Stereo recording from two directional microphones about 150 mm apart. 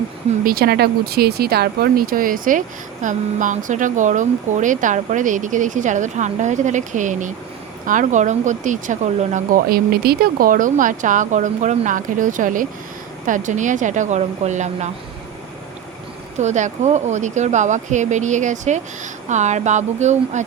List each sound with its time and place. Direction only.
0.4 s speech: 90° right; by 9.6 s 55° right (ahead or behind)
9.6 s speech: 85° right; by 14.8 s 50° right (ahead or behind)
16.4 s speech: 50° right (ahead or behind)